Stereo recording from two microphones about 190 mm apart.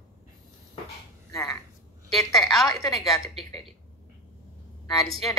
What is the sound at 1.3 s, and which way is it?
Speech, 15° left (ahead or behind).